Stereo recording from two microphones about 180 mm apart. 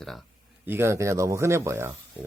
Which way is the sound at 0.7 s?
15° right (ahead or behind).